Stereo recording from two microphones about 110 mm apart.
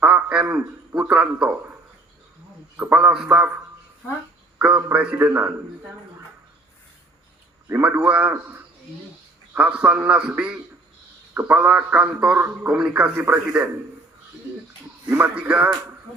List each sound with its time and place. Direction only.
0.0 s a sound: 10° right (ahead or behind)
0.9 s a man's voice: 10° right (ahead or behind)
2.7 s a man's voice: 10° right (ahead or behind)
7.7 s a man's voice: 15° right (ahead or behind)
15.2 s a man's voice: 15° right (ahead or behind)